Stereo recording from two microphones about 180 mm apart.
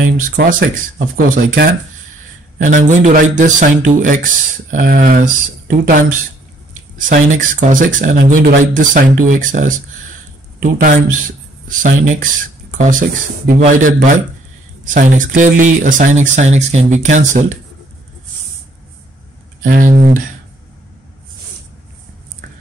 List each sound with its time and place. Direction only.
0.0 s speech: 50° right (ahead or behind)
13.5 s speech: 45° right (ahead or behind)
19.6 s speech: 50° right (ahead or behind)